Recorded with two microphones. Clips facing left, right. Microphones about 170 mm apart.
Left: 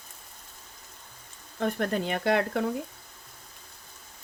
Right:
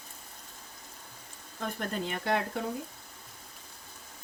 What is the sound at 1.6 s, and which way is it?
Speech, 65° left (ahead or behind).